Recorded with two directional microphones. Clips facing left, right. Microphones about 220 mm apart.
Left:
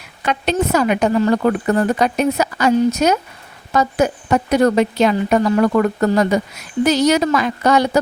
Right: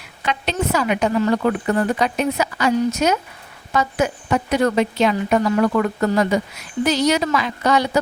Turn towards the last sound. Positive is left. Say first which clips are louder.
# left 3 dB
turn(degrees=45)  # may be behind; listen again after turning